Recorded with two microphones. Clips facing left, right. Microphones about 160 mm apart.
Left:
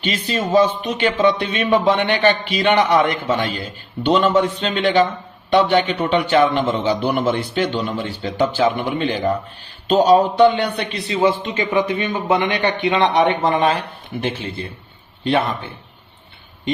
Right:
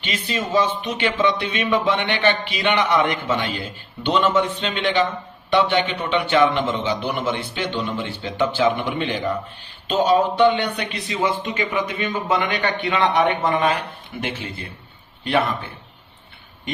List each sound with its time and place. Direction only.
0.0 s a man's voice: 35° left (ahead or behind)
15.2 s a man's voice: 25° left (ahead or behind)